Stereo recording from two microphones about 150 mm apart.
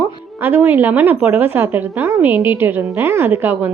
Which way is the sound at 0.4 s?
15° right (ahead or behind).